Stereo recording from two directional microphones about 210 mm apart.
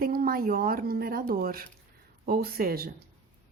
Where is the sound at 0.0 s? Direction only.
45° right (ahead or behind).